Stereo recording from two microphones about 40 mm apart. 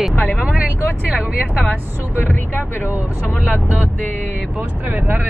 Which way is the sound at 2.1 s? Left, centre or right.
Left.